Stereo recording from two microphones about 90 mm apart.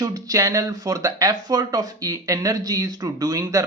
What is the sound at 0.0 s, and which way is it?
Speech, 45° right (ahead or behind).